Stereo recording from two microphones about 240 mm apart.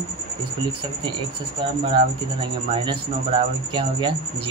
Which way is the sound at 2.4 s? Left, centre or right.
Right.